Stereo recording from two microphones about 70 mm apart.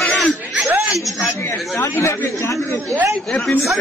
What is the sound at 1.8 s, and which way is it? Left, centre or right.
Speech, left.